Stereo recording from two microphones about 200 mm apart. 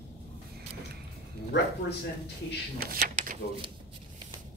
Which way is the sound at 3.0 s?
35° right (ahead or behind).